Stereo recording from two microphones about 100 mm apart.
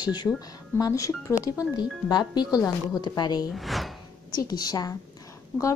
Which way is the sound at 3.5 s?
Centre (ahead or behind).